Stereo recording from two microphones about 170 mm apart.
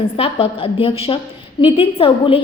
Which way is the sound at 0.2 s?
30° left (ahead or behind).